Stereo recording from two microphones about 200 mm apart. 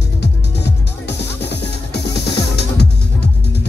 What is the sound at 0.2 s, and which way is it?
Music, 60° left (ahead or behind).